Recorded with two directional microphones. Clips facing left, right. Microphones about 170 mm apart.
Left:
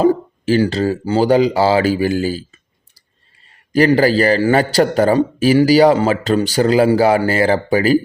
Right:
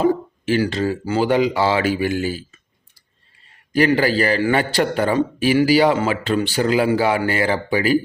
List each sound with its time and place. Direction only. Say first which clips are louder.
0.0 s a man's voice: left 4 dB; 35° left (ahead or behind)
3.7 s a man's voice: left 4 dB; 35° left (ahead or behind)